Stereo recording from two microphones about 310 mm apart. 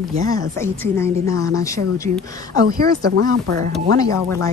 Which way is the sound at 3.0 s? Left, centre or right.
Right.